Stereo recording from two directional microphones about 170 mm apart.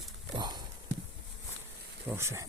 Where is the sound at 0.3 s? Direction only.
25° right (ahead or behind).